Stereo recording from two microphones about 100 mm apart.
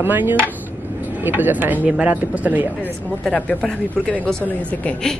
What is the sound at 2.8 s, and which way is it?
Speech, 15° left (ahead or behind).